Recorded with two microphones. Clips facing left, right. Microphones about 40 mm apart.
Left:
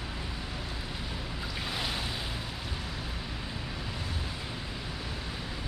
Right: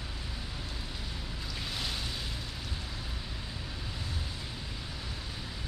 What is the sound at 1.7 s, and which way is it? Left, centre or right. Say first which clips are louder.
Waves: left 3 dB; centre.